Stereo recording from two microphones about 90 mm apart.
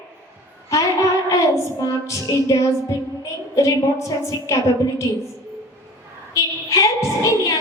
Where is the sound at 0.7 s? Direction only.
35° left (ahead or behind).